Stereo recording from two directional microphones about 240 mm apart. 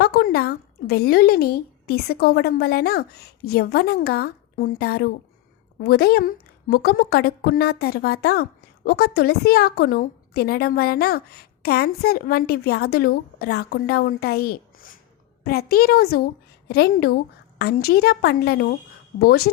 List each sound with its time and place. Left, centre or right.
0.0 s a woman's voice: left